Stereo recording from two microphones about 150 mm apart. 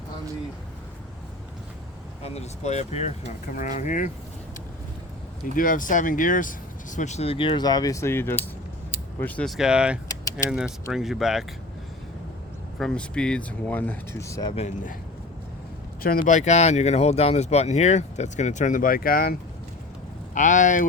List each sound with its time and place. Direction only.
2.2 s speech: 45° left (ahead or behind)
5.5 s speech: 65° left (ahead or behind); by 11.4 s centre (ahead or behind)
12.8 s speech: 5° left (ahead or behind); by 14.5 s 20° left (ahead or behind)
16.0 s speech: 70° left (ahead or behind)
20.3 s speech: 55° left (ahead or behind)